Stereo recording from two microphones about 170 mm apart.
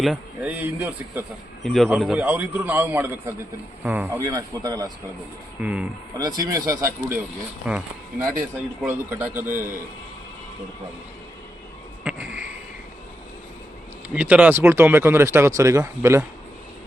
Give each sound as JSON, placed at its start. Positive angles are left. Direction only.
{"t": 0.0, "sound": "a man's voice", "side_deg": -5}
{"t": 1.6, "sound": "a man's voice", "side_deg": 0}
{"t": 5.6, "sound": "a man's voice", "side_deg": -5}
{"t": 6.1, "sound": "speech", "side_deg": -20}
{"t": 7.6, "sound": "a man's voice", "side_deg": -5}
{"t": 8.9, "sound": "a man's voice", "side_deg": -10}
{"t": 12.0, "sound": "a sound", "side_deg": -5}
{"t": 14.1, "sound": "a man's voice", "side_deg": -10}